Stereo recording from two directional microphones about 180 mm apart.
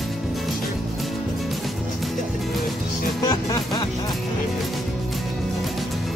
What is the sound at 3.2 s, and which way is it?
Music, 20° left (ahead or behind).